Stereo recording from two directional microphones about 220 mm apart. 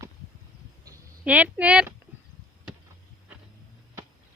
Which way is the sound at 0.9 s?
5° right (ahead or behind).